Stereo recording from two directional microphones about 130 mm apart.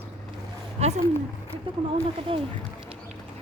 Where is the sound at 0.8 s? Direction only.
60° right (ahead or behind).